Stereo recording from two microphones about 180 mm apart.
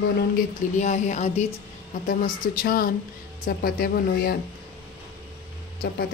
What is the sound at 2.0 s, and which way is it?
Speech, 50° left (ahead or behind).